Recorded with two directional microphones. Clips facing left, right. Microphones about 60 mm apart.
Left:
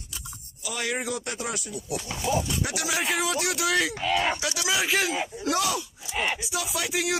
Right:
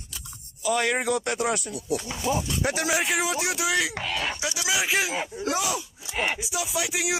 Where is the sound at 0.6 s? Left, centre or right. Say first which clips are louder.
Right 6 dB; right.